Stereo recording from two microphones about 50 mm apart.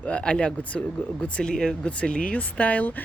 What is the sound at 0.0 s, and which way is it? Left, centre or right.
Speech, left.